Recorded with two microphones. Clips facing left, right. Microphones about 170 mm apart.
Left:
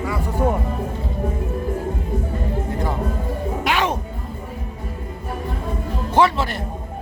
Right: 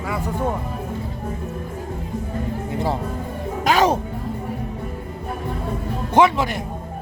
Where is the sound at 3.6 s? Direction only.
40° right (ahead or behind).